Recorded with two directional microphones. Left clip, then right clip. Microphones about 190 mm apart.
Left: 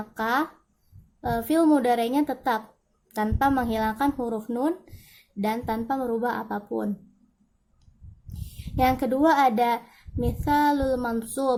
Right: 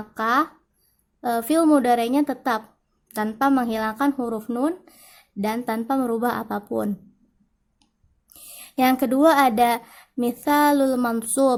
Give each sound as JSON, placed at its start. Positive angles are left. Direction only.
{"t": 0.2, "sound": "speech", "side_deg": -25}
{"t": 8.7, "sound": "speech", "side_deg": -30}